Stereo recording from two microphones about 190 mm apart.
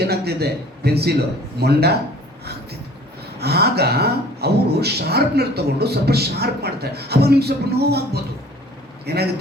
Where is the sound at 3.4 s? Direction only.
55° right (ahead or behind).